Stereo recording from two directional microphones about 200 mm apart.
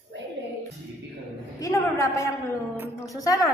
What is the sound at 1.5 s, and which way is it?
Speech, 15° left (ahead or behind).